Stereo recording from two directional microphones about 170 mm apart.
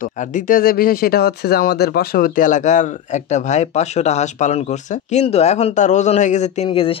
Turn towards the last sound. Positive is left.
turn(degrees=35)  # may be behind; listen again after turning